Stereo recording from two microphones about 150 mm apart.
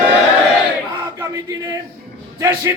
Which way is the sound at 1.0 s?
20° right (ahead or behind).